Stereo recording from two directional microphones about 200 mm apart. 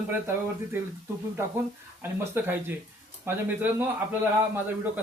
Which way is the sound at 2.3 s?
10° right (ahead or behind).